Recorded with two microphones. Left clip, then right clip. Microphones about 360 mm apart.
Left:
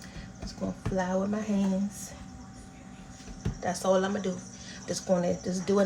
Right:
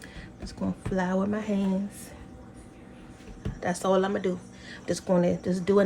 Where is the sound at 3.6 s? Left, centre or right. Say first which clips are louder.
Right 1 dB; right.